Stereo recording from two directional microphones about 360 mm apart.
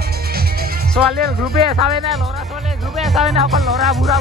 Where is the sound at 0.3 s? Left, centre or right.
Right.